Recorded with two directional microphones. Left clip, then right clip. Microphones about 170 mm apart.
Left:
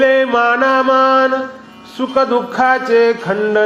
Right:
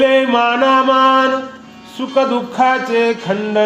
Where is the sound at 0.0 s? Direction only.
10° left (ahead or behind).